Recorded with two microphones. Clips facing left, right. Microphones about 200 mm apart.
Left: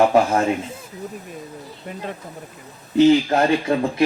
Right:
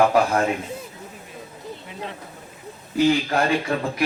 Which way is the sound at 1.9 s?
50° left (ahead or behind).